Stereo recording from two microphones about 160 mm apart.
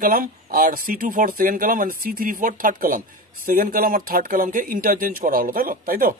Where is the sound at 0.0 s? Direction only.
60° right (ahead or behind).